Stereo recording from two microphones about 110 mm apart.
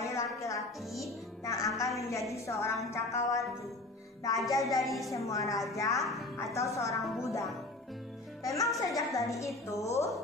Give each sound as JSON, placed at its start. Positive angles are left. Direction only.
{"t": 0.0, "sound": "music", "side_deg": 30}
{"t": 1.4, "sound": "a woman's voice", "side_deg": 25}
{"t": 4.4, "sound": "speech", "side_deg": 0}
{"t": 5.3, "sound": "a woman's voice", "side_deg": 30}
{"t": 7.0, "sound": "speech", "side_deg": 0}
{"t": 7.2, "sound": "a woman's voice", "side_deg": 30}